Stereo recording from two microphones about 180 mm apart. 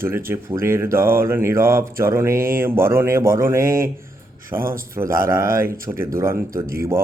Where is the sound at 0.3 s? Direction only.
15° right (ahead or behind).